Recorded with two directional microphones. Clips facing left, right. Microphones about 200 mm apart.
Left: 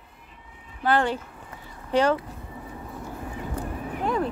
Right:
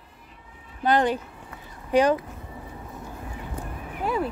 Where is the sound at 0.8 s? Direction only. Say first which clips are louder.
Right 2 dB; 20° right (ahead or behind).